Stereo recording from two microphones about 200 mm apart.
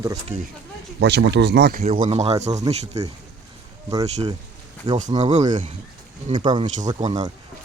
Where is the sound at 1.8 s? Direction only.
35° right (ahead or behind).